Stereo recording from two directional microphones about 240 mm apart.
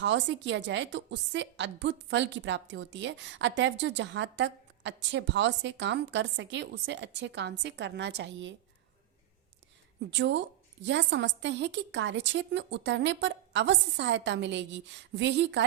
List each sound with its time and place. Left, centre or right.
0.0 s a woman's voice: right
10.1 s a woman's voice: right